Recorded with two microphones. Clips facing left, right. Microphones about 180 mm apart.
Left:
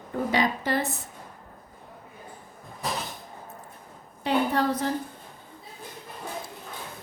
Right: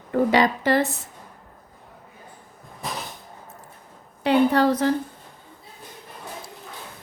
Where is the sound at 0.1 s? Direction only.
90° right.